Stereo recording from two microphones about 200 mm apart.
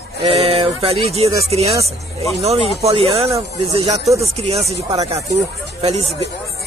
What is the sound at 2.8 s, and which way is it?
Speech, 30° right (ahead or behind).